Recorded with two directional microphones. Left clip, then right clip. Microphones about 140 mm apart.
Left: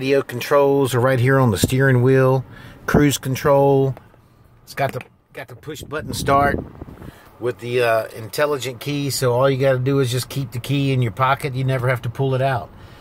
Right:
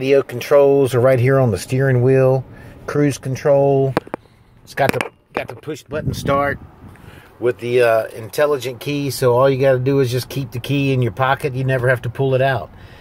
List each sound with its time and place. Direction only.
0.0 s speech: 20° left (ahead or behind)
5.9 s speech: 25° left (ahead or behind)
7.6 s speech: 5° right (ahead or behind)